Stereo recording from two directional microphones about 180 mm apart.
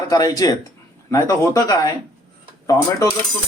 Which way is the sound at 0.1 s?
20° left (ahead or behind).